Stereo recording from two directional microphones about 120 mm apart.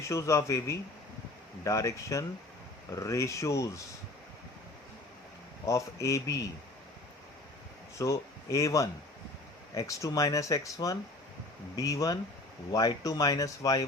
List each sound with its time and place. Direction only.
0.0 s speech: 25° left (ahead or behind)
5.6 s speech: 25° left (ahead or behind)
7.9 s speech: 25° left (ahead or behind)